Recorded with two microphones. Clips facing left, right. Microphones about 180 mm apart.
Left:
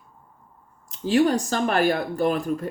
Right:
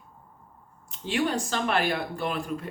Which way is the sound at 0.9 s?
40° left (ahead or behind).